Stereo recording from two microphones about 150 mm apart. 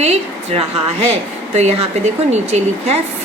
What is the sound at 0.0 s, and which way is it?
A woman's voice, 45° right (ahead or behind).